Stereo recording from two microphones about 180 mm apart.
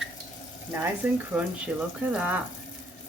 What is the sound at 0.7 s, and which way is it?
Speech, 10° right (ahead or behind).